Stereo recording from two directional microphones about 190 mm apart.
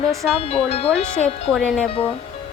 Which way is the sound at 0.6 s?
35° left (ahead or behind).